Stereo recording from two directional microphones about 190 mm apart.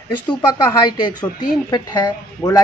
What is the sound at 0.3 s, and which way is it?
A woman's voice, 20° left (ahead or behind).